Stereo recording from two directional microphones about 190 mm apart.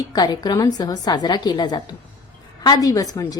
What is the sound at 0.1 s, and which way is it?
A woman's voice, 20° left (ahead or behind).